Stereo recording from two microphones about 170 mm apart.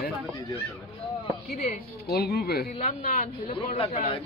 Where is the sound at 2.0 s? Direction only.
70° left (ahead or behind).